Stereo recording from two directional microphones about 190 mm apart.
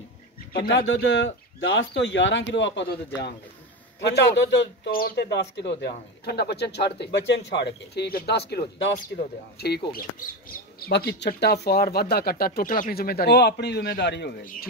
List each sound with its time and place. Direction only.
0.7 s speech: 75° left (ahead or behind)
4.0 s a man's voice: 65° left (ahead or behind)
8.9 s a man's voice: 55° left (ahead or behind)